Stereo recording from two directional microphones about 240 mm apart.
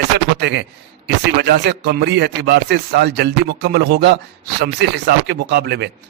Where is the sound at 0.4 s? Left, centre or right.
Right.